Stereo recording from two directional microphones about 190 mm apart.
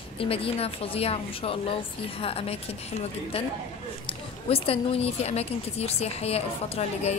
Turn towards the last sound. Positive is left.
turn(degrees=35)  # may be behind; listen again after turning